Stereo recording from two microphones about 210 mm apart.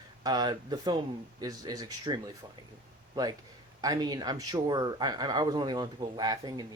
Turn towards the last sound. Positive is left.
turn(degrees=-20)  # may be behind; listen again after turning